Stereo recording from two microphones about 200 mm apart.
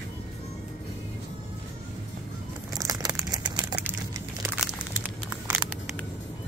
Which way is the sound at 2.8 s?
20° right (ahead or behind).